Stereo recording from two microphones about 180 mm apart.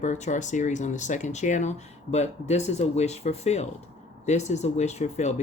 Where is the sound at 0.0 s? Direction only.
40° left (ahead or behind).